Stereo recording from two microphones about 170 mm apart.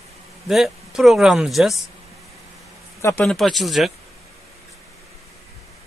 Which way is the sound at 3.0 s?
15° left (ahead or behind).